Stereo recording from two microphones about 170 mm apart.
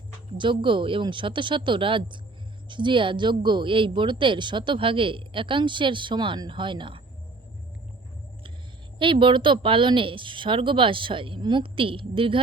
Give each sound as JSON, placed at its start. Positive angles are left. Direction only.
{"t": 0.3, "sound": "speech", "side_deg": -30}
{"t": 9.0, "sound": "speech", "side_deg": -30}